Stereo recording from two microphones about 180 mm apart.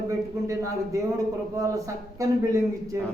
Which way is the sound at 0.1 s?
20° right (ahead or behind).